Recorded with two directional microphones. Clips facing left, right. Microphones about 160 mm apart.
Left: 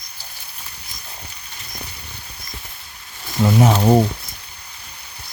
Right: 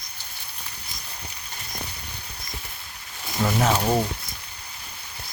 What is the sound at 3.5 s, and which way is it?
Speech, 15° left (ahead or behind).